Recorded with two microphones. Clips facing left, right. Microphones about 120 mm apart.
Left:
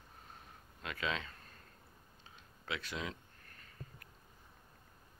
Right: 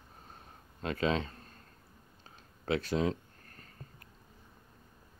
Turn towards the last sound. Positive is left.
turn(degrees=-40)  # may be behind; listen again after turning